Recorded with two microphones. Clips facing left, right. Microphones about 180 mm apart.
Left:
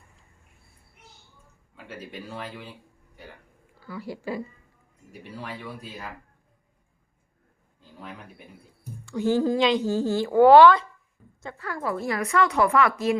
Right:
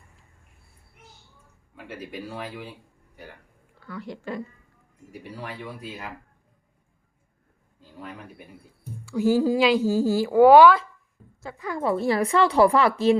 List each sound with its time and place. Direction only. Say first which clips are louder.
1.7 s speech: right 3 dB; 10° right (ahead or behind)
3.8 s speech: left 1 dB; 5° left (ahead or behind)
5.4 s speech: even; 15° right (ahead or behind)
9.0 s speech: right 2 dB; 5° right (ahead or behind)
11.8 s speech: right 5 dB; 25° right (ahead or behind)